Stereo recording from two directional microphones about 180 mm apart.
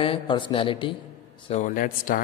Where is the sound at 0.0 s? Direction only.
30° left (ahead or behind).